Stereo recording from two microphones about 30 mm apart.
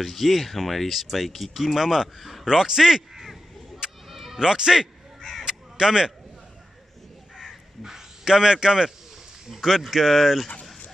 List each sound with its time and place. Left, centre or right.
0.0 s speech: centre
1.8 s speech: centre
4.1 s music: centre
4.4 s speech: right
5.4 s crow: right
7.3 s crow: centre
9.5 s speech: centre